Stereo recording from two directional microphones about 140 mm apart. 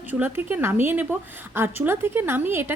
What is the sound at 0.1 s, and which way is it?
A woman's voice, 15° right (ahead or behind).